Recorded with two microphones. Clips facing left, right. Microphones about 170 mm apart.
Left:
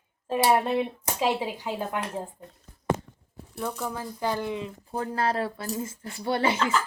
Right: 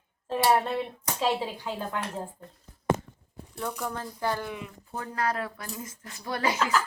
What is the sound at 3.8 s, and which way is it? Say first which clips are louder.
Speech: even; 10° left (ahead or behind).